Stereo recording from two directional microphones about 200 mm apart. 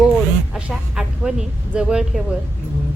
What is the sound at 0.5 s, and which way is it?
A woman's voice, 5° right (ahead or behind).